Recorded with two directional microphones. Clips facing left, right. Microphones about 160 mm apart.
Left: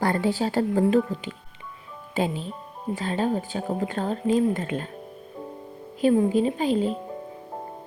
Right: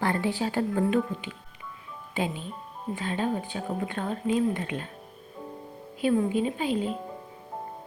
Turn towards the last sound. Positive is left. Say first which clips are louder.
# left 5 dB
turn(degrees=40)  # may be behind; listen again after turning